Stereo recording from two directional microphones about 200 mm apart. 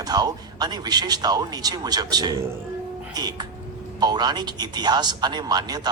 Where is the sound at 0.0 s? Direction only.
20° right (ahead or behind).